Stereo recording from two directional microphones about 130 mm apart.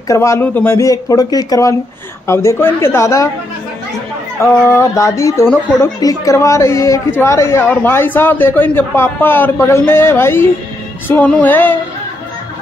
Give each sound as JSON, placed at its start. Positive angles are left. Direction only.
{"t": 0.1, "sound": "a woman's voice", "side_deg": 20}
{"t": 0.8, "sound": "a woman's voice", "side_deg": 25}
{"t": 4.4, "sound": "a woman's voice", "side_deg": 20}
{"t": 11.1, "sound": "music", "side_deg": 15}